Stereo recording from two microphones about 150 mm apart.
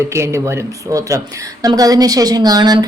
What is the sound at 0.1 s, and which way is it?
Speech, 20° right (ahead or behind).